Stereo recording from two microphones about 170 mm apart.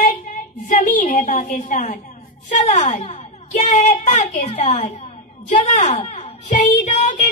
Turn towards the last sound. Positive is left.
turn(degrees=45)  # may be behind; listen again after turning